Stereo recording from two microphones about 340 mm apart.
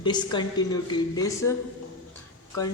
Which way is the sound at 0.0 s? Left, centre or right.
Centre.